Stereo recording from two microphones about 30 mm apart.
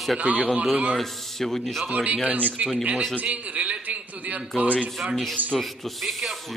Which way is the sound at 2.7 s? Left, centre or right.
Right.